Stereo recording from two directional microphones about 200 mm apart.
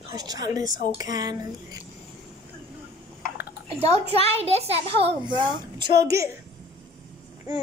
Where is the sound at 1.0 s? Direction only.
20° right (ahead or behind).